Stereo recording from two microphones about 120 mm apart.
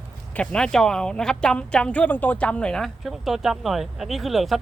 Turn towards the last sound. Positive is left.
turn(degrees=0)  # may be behind; listen again after turning